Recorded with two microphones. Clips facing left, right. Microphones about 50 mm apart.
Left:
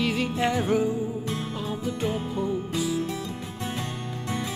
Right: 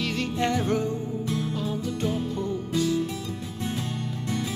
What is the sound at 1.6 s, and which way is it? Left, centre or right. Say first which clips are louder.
Music: even; centre.